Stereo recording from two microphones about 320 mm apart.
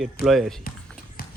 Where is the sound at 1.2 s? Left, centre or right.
Left.